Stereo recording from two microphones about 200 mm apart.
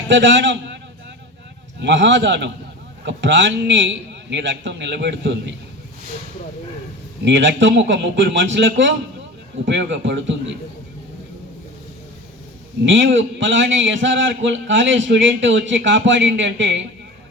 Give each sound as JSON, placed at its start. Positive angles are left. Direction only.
{"t": 0.1, "sound": "a man's voice", "side_deg": -65}
{"t": 1.8, "sound": "a man's voice", "side_deg": -65}
{"t": 7.3, "sound": "a man's voice", "side_deg": -65}
{"t": 12.8, "sound": "a man's voice", "side_deg": -65}